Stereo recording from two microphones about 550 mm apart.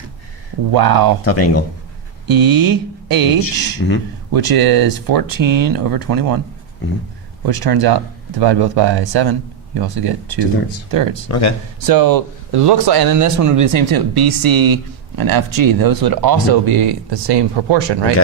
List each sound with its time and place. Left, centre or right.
0.7 s speech: right
1.2 s speech: left
2.2 s speech: right
3.4 s speech: centre
4.4 s speech: right
7.4 s speech: right
11.3 s speech: left
11.9 s speech: right